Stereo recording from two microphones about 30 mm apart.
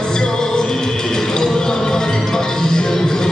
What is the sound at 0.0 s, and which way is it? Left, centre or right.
Music, left.